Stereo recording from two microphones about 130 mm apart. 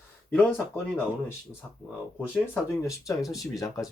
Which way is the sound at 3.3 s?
25° left (ahead or behind).